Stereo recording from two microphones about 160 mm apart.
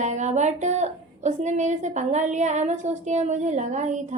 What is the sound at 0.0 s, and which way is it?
A woman's voice, 50° right (ahead or behind).